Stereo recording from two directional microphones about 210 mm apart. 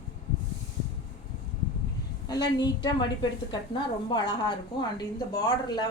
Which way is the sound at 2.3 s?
20° left (ahead or behind).